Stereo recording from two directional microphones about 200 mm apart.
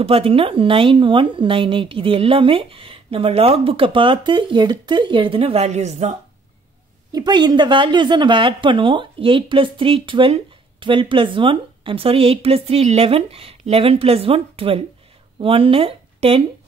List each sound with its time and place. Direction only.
0.0 s a woman's voice: 30° right (ahead or behind)
7.1 s a woman's voice: 20° right (ahead or behind)